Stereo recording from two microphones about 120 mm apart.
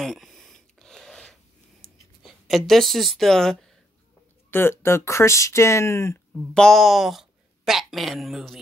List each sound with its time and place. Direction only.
0.0 s a sound: centre (ahead or behind)
2.2 s speech: centre (ahead or behind)
4.5 s speech: 20° left (ahead or behind)
6.5 s speech: 5° left (ahead or behind)